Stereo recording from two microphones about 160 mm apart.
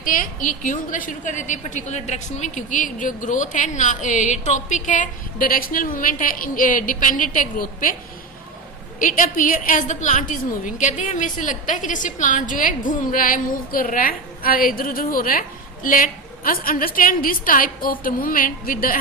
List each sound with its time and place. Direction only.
0.0 s a woman's voice: 55° left (ahead or behind)
9.0 s a woman's voice: 55° left (ahead or behind)